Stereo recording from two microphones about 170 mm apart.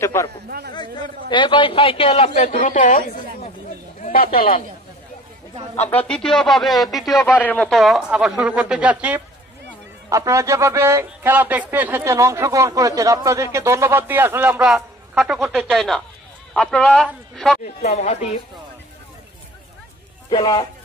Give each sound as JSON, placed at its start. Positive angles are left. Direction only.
{"t": 0.0, "sound": "a man's voice", "side_deg": 15}
{"t": 0.5, "sound": "a man's voice", "side_deg": -65}
{"t": 1.3, "sound": "a woman's voice", "side_deg": 30}
{"t": 4.0, "sound": "speech", "side_deg": 60}
{"t": 5.8, "sound": "speech", "side_deg": 10}
{"t": 7.3, "sound": "a man's voice", "side_deg": 10}
{"t": 17.8, "sound": "speech", "side_deg": 45}
{"t": 20.2, "sound": "a man's voice", "side_deg": 25}